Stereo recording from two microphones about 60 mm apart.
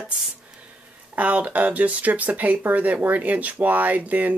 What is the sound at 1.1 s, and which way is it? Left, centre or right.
Speech, right.